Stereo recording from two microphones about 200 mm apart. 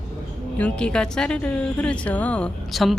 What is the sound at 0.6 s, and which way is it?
A woman's voice, 5° left (ahead or behind).